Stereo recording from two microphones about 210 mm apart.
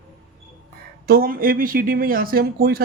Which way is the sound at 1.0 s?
45° right (ahead or behind).